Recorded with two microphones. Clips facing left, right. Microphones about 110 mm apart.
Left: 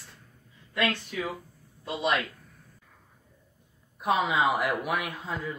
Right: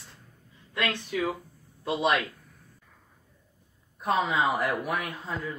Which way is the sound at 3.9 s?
5° left (ahead or behind).